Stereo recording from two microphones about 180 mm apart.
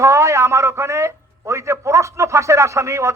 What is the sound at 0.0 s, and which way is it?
A man's voice, 15° right (ahead or behind).